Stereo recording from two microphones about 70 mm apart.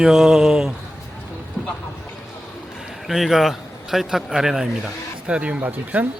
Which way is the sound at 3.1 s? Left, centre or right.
Centre.